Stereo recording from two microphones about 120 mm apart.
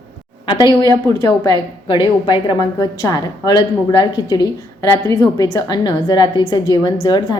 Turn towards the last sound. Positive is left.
turn(degrees=35)  # may be behind; listen again after turning